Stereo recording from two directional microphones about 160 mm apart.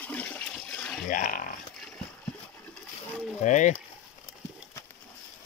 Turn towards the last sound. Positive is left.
turn(degrees=50)  # may be behind; listen again after turning